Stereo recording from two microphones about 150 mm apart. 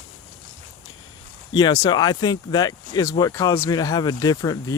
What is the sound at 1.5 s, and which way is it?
Speech, 25° left (ahead or behind).